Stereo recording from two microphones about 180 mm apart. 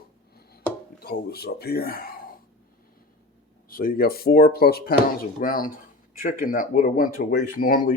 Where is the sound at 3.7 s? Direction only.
55° left (ahead or behind).